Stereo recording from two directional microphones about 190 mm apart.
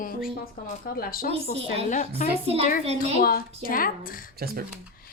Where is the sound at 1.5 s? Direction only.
30° right (ahead or behind).